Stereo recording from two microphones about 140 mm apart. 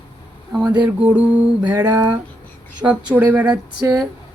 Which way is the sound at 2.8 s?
15° right (ahead or behind).